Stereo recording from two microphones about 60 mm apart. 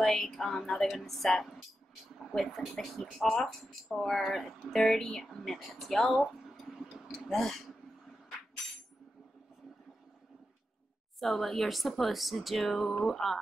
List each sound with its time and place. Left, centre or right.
0.0 s speech: centre
11.1 s speech: centre